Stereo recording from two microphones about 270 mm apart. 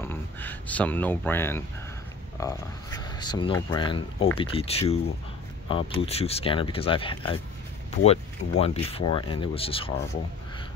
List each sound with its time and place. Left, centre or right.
0.0 s speech: centre